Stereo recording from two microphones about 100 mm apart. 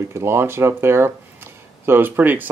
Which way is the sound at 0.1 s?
25° right (ahead or behind).